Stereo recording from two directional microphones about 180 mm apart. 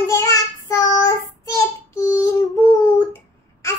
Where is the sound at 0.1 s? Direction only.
20° left (ahead or behind).